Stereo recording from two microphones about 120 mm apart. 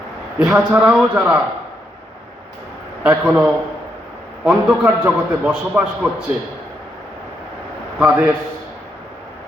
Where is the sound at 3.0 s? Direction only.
10° right (ahead or behind).